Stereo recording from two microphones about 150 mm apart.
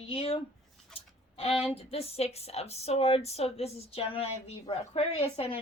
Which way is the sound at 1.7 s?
40° left (ahead or behind).